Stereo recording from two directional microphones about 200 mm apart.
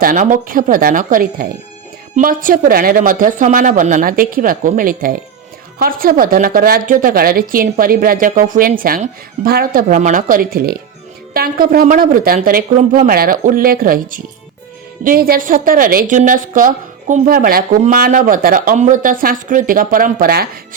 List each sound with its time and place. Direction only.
0.0 s a woman's voice: 45° right (ahead or behind)